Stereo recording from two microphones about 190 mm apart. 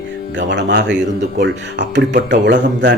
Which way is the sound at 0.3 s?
70° right (ahead or behind).